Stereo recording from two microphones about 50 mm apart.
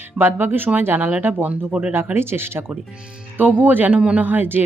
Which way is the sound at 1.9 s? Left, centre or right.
Right.